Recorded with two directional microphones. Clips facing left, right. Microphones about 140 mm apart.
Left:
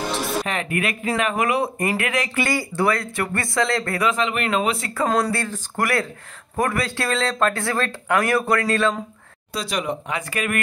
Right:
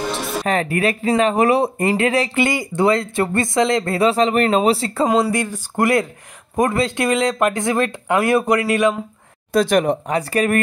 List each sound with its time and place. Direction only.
0.1 s music: centre (ahead or behind)
0.5 s speech: 35° right (ahead or behind)
5.0 s speech: 15° right (ahead or behind)
9.5 s speech: 50° right (ahead or behind); by 10.6 s 35° right (ahead or behind)